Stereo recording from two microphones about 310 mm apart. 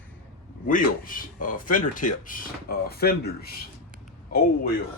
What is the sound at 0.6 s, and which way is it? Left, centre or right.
Speech, left.